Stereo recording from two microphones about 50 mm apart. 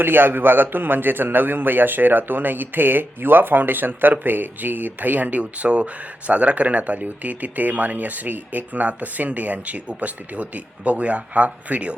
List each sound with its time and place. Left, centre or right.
0.0 s a man's voice: right